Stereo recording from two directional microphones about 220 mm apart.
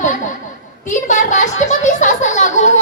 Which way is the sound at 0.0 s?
35° left (ahead or behind).